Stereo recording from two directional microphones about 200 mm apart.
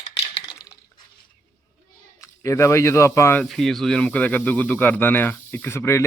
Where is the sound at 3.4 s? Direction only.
Centre (ahead or behind).